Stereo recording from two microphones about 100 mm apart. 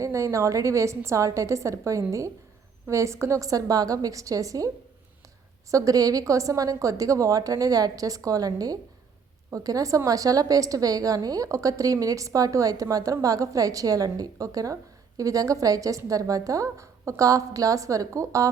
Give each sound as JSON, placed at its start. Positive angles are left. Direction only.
{"t": 0.0, "sound": "a woman's voice", "side_deg": -30}
{"t": 5.7, "sound": "a woman's voice", "side_deg": -35}